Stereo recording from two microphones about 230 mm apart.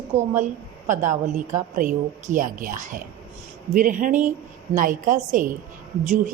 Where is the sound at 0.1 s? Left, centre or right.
Right.